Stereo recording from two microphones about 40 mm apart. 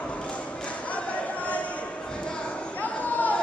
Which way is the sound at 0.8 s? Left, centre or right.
Left.